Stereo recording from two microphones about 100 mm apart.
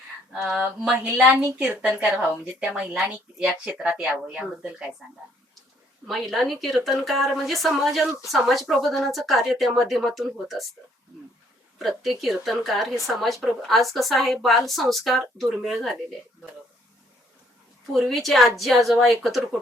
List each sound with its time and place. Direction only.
0.4 s speech: 20° right (ahead or behind)
6.1 s speech: centre (ahead or behind)
11.8 s speech: centre (ahead or behind)
17.9 s speech: centre (ahead or behind)